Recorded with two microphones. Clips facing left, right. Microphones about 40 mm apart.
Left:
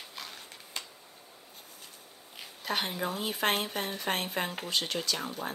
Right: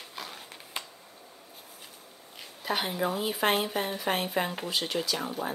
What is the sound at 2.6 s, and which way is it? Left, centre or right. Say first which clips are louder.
Speech: right 3 dB; centre.